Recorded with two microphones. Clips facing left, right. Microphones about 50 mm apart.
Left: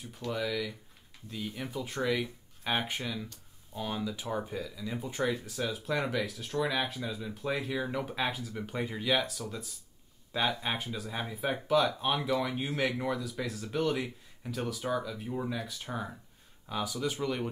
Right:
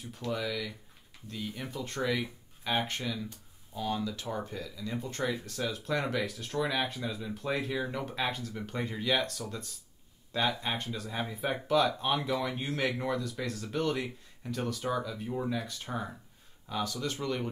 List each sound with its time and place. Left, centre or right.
0.0 s speech: centre